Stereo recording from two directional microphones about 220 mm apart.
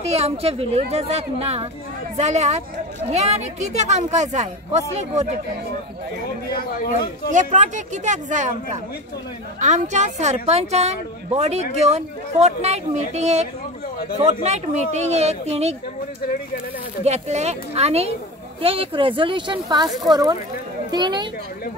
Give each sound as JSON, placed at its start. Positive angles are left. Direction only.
{"t": 0.1, "sound": "a woman's voice", "side_deg": -30}
{"t": 7.3, "sound": "a woman's voice", "side_deg": -35}
{"t": 9.6, "sound": "a woman's voice", "side_deg": -35}
{"t": 17.0, "sound": "speech", "side_deg": -30}